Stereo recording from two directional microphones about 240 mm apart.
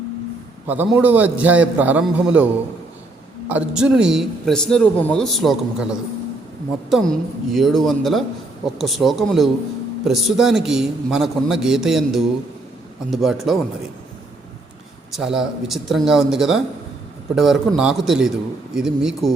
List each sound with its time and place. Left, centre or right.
0.7 s a man's voice: centre
3.5 s speech: centre
15.1 s speech: centre